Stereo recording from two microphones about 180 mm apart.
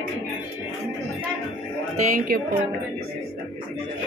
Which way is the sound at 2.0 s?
50° right (ahead or behind).